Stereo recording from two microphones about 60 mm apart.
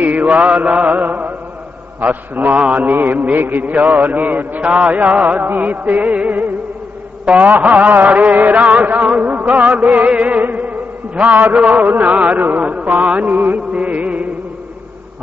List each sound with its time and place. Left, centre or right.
0.0 s mantra: right
13.6 s music: right